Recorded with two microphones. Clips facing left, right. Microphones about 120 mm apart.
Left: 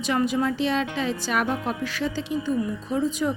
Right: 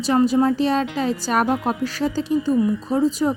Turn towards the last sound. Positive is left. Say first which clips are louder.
# right 5 dB
turn(degrees=-40)  # may be behind; listen again after turning